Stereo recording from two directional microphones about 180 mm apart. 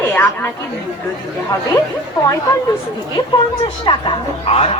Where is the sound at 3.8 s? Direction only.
25° left (ahead or behind).